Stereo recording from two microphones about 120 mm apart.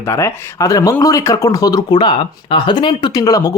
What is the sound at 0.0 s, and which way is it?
Speech, 20° left (ahead or behind).